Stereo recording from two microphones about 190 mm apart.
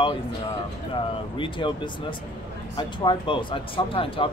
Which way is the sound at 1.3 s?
25° left (ahead or behind).